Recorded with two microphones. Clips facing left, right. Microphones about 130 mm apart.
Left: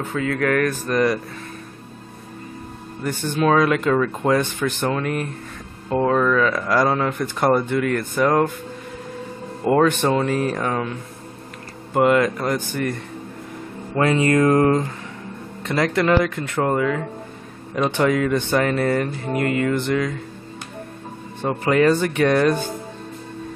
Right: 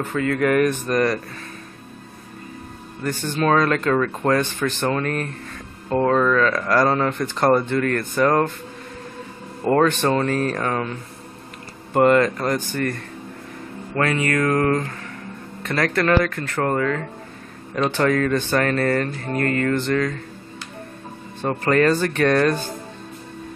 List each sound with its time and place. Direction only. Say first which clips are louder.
0.1 s speech: right 1 dB; centre (ahead or behind)
0.6 s speech: right 2 dB; 15° right (ahead or behind)
0.9 s speech: left 2 dB; 10° left (ahead or behind)
3.0 s speech: left 1 dB; 15° left (ahead or behind)
9.7 s speech: left 1 dB; 10° left (ahead or behind)
13.9 s mantra: left 4 dB; 25° left (ahead or behind)
15.6 s speech: left 1 dB; 15° left (ahead or behind)
21.5 s speech: left 1 dB; 10° left (ahead or behind)